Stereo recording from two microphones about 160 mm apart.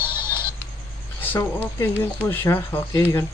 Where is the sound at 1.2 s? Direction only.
10° left (ahead or behind).